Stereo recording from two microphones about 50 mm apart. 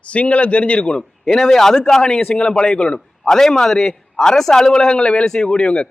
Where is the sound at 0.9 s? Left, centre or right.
Centre.